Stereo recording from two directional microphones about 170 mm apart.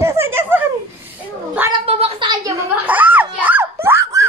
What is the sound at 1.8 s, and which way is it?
Speech, 30° right (ahead or behind).